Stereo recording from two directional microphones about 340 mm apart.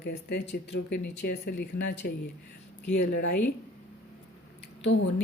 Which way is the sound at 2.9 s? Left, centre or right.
Left.